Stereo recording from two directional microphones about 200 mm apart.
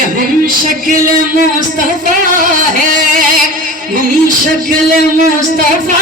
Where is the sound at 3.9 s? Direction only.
40° right (ahead or behind).